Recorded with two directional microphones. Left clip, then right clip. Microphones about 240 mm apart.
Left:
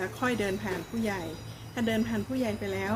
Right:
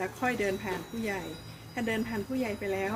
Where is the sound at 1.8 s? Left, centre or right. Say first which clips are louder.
Left 2 dB; centre.